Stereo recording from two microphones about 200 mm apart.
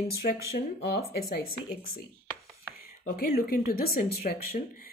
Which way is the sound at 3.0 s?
50° left (ahead or behind).